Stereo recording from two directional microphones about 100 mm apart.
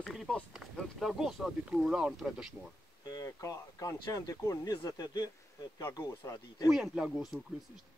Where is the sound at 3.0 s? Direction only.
35° left (ahead or behind).